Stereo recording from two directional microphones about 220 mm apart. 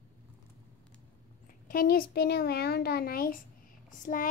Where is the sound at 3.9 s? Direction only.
35° left (ahead or behind).